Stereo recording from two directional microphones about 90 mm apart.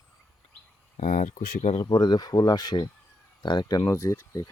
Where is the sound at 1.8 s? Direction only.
50° left (ahead or behind).